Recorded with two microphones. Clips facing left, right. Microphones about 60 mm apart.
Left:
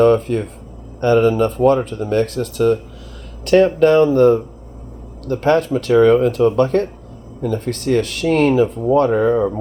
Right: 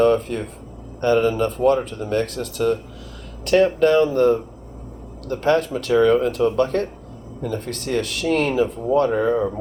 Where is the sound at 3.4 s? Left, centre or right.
Left.